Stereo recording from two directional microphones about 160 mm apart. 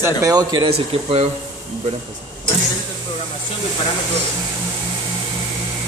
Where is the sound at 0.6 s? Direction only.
40° right (ahead or behind).